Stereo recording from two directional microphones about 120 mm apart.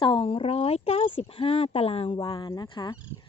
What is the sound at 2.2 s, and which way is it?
Speech, 45° left (ahead or behind).